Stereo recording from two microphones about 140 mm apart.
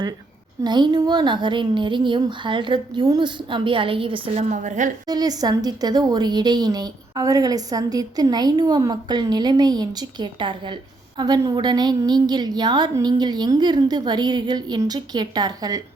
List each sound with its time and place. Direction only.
0.6 s a woman's voice: 30° right (ahead or behind)
4.4 s a woman's voice: 60° right (ahead or behind)
5.0 s a woman's voice: 25° right (ahead or behind)